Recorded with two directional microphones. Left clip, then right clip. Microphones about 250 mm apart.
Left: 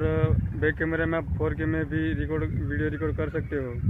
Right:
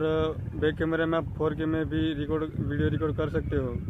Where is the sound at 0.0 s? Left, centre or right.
Centre.